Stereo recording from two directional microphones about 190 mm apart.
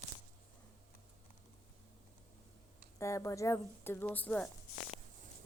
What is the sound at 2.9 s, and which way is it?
A woman's voice, 15° left (ahead or behind).